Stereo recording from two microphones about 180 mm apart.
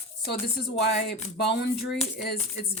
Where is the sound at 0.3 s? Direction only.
60° left (ahead or behind).